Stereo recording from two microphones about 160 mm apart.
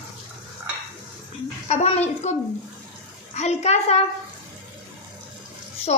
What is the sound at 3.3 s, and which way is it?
Speech, 45° left (ahead or behind).